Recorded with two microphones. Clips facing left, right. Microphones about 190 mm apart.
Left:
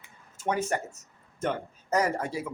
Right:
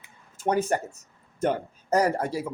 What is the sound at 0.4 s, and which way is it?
Speech, 35° right (ahead or behind).